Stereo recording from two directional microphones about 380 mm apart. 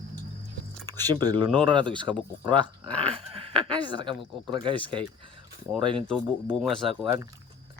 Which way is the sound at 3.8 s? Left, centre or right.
Centre.